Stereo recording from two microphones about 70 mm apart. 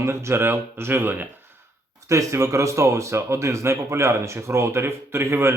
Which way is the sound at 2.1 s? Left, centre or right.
Right.